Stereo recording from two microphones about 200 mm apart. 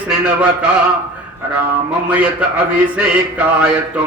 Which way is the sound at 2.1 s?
5° right (ahead or behind).